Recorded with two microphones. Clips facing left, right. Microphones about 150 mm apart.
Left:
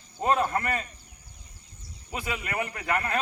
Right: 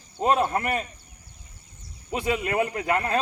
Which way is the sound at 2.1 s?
25° right (ahead or behind).